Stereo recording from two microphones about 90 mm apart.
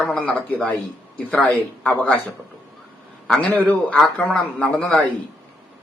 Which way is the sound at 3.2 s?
15° left (ahead or behind).